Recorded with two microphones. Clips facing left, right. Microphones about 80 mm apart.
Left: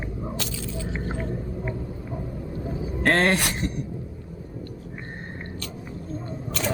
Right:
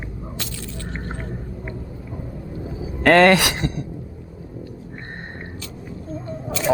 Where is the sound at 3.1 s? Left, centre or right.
Right.